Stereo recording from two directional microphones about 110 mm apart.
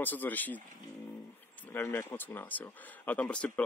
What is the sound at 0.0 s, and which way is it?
Speech, 15° left (ahead or behind).